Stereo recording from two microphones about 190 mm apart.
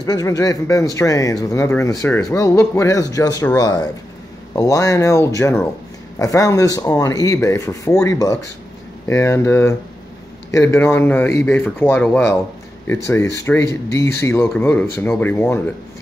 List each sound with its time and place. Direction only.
0.0 s speech: 20° left (ahead or behind)